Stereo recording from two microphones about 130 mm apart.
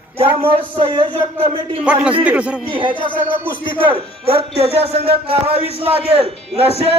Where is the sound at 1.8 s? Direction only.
10° right (ahead or behind).